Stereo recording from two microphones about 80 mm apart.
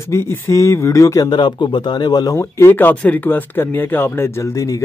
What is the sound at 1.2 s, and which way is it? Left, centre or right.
Speech, left.